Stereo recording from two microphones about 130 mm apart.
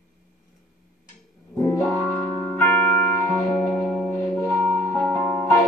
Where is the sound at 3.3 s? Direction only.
5° left (ahead or behind).